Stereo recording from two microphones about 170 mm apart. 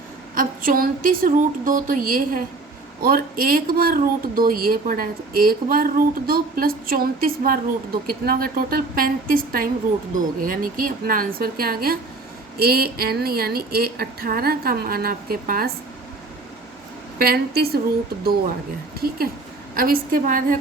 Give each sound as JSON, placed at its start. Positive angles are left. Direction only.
{"t": 0.3, "sound": "speech", "side_deg": -55}
{"t": 17.2, "sound": "speech", "side_deg": -65}
{"t": 18.9, "sound": "speech", "side_deg": -60}